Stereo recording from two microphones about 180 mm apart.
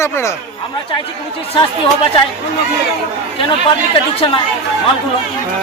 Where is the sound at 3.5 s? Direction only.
30° left (ahead or behind).